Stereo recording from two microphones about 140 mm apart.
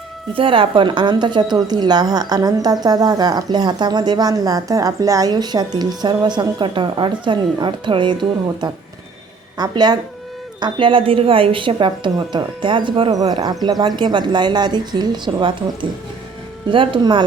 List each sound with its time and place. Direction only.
0.3 s a woman's voice: 40° right (ahead or behind)